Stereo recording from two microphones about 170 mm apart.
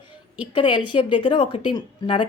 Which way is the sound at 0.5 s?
30° left (ahead or behind).